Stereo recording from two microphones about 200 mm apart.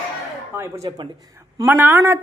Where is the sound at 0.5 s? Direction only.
15° right (ahead or behind).